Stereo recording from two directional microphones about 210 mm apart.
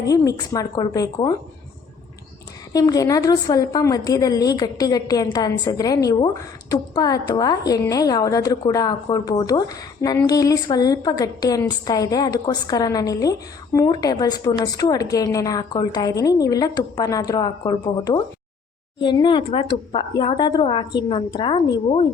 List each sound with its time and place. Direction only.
0.0 s a woman's voice: 15° left (ahead or behind)
2.7 s a woman's voice: 15° left (ahead or behind)